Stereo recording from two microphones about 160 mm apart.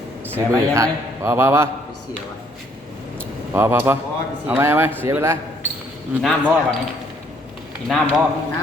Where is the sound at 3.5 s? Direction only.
15° right (ahead or behind).